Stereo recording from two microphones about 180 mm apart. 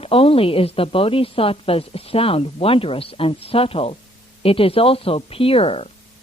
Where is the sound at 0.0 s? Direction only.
30° left (ahead or behind).